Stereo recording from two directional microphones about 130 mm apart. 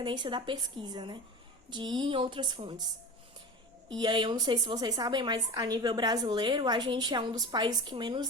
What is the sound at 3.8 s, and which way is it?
Speech, 35° right (ahead or behind).